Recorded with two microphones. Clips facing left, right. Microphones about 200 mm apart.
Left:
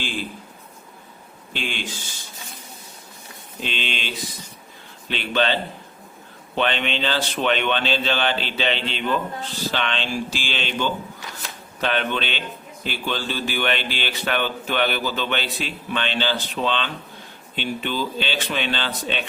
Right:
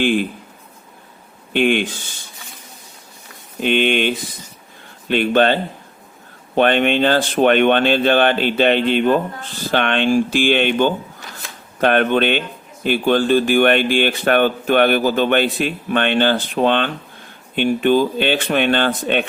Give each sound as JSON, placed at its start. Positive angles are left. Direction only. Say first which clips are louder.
{"t": 0.0, "sound": "speech", "louder": "right 13 dB", "side_deg": -60}
{"t": 1.5, "sound": "speech", "louder": "right 14 dB", "side_deg": -60}
{"t": 3.6, "sound": "speech", "louder": "right 13 dB", "side_deg": -55}
{"t": 6.6, "sound": "speech", "louder": "right 9 dB", "side_deg": -50}